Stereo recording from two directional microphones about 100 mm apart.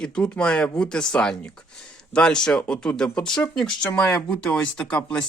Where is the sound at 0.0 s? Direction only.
10° left (ahead or behind).